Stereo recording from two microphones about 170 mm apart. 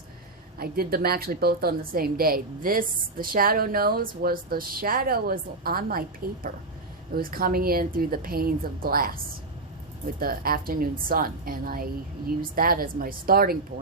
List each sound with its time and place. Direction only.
0.6 s a woman's voice: 65° right (ahead or behind)